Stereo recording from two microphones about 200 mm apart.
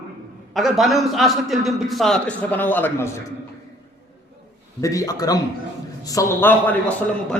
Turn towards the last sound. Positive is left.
turn(degrees=10)  # may be behind; listen again after turning